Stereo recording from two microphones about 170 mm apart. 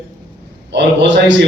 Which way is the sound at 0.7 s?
90° right.